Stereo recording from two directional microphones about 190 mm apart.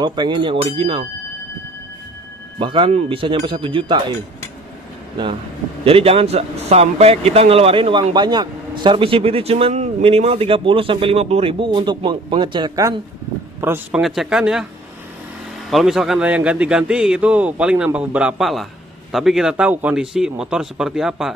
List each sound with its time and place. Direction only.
0.0 s speech: 25° right (ahead or behind)
2.6 s speech: 25° right (ahead or behind)
5.9 s a man's voice: 30° right (ahead or behind); by 14.0 s 10° right (ahead or behind)
14.0 s a man's voice: centre (ahead or behind)
15.7 s a man's voice: centre (ahead or behind)